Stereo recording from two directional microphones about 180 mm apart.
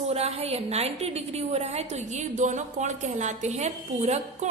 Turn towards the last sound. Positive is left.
turn(degrees=-40)  # may be behind; listen again after turning